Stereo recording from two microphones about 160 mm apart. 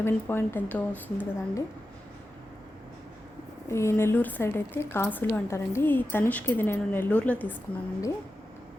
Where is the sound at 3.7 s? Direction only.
15° left (ahead or behind).